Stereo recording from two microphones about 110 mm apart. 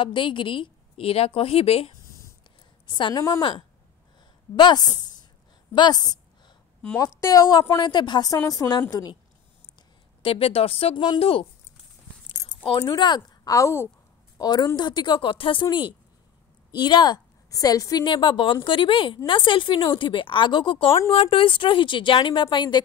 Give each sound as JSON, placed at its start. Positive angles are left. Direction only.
{"t": 0.0, "sound": "a woman's voice", "side_deg": 50}
{"t": 2.9, "sound": "a woman's voice", "side_deg": 45}
{"t": 5.8, "sound": "a sound", "side_deg": 40}
{"t": 7.0, "sound": "a woman's voice", "side_deg": 30}
{"t": 10.2, "sound": "a woman's voice", "side_deg": 60}
{"t": 12.8, "sound": "speech", "side_deg": 40}
{"t": 14.4, "sound": "a woman's voice", "side_deg": 35}